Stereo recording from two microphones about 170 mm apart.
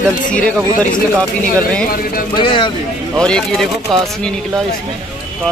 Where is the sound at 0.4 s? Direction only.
5° left (ahead or behind).